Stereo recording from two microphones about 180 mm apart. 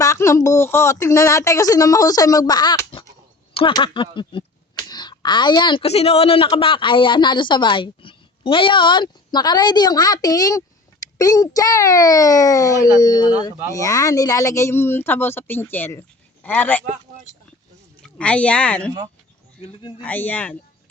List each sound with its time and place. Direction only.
0.0 s speech: 15° left (ahead or behind)
18.0 s speech: 5° left (ahead or behind)
20.0 s speech: 10° left (ahead or behind)